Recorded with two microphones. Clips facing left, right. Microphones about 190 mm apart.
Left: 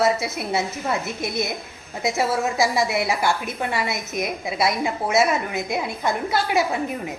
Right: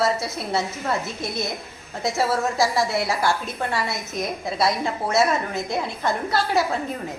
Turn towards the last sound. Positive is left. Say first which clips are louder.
# even
turn(degrees=15)  # may be behind; listen again after turning